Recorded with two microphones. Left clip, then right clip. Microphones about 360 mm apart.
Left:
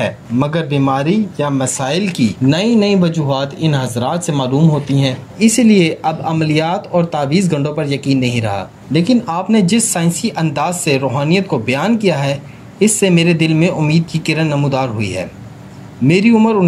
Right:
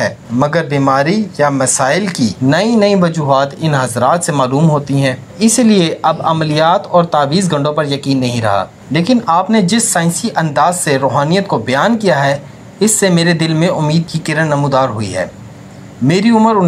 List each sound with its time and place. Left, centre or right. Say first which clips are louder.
0.0 s speech: right 3 dB; centre